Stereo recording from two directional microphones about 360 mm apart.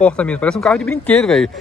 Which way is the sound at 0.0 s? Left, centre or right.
Centre.